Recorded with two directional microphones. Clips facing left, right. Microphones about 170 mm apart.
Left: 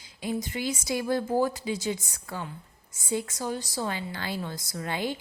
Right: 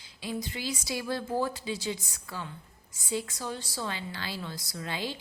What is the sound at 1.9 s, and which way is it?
Speech, 45° left (ahead or behind).